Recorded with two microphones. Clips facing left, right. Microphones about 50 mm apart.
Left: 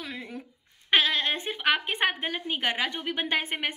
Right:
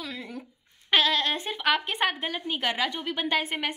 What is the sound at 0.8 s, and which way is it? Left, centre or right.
A woman's voice, left.